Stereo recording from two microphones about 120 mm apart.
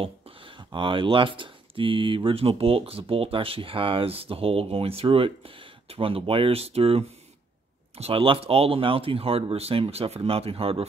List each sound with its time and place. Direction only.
0.7 s speech: 45° right (ahead or behind)